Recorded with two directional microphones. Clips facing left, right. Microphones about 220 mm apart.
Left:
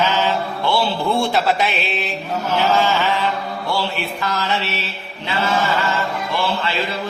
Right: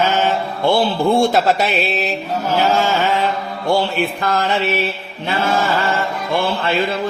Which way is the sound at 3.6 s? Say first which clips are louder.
Right 8 dB; 50° right (ahead or behind).